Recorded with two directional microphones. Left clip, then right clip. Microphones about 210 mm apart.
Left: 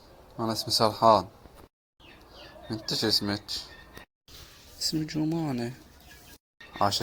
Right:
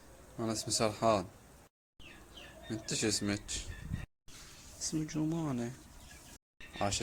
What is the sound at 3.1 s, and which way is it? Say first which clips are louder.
Speech: left 10 dB; 20° right (ahead or behind).